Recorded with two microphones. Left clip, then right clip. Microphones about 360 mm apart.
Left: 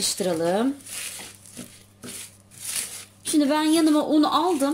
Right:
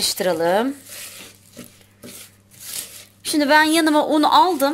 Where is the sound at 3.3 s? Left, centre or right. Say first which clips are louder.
Right 6 dB; right.